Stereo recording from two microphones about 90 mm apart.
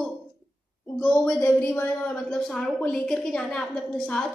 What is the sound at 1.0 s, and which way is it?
Speech, 15° left (ahead or behind).